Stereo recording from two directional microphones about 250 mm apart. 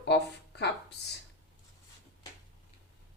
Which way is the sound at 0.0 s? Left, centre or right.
Left.